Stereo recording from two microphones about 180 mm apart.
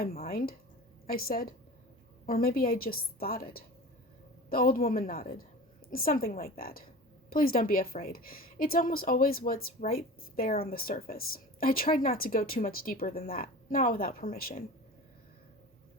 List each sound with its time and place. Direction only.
0.3 s a woman's voice: 55° left (ahead or behind)